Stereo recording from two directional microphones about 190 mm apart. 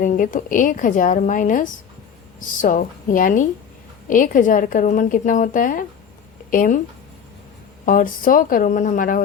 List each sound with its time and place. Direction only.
0.0 s a woman's voice: 45° left (ahead or behind)
7.9 s a woman's voice: 45° left (ahead or behind)